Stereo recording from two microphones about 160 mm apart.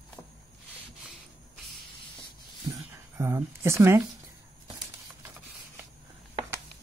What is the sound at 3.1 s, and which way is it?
Speech, 15° right (ahead or behind).